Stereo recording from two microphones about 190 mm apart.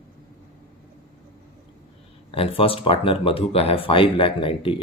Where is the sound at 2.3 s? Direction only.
30° left (ahead or behind).